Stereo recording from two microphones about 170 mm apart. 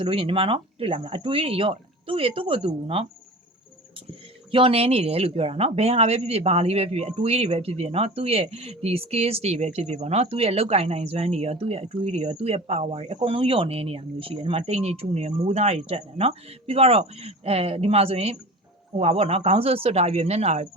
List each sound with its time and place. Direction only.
0.0 s speech: 35° right (ahead or behind)
4.5 s speech: 35° right (ahead or behind)